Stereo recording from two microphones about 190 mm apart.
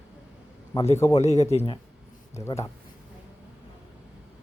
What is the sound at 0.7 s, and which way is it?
Speech, 20° left (ahead or behind).